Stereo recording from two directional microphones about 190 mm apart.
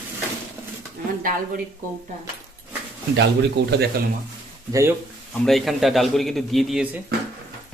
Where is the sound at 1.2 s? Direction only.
45° right (ahead or behind).